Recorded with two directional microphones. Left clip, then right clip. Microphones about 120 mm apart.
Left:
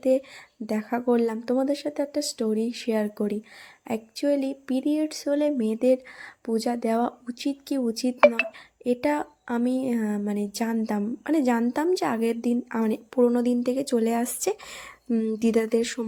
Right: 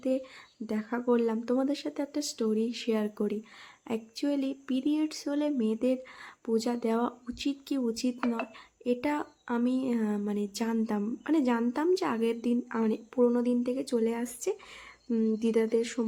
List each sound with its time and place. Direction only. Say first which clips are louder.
0.0 s speech: left 8 dB; 40° left (ahead or behind); by 14.6 s 55° left (ahead or behind)
15.1 s speech: left 4 dB; 40° left (ahead or behind)